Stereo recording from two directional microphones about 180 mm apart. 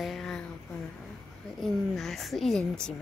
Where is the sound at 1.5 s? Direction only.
Centre (ahead or behind).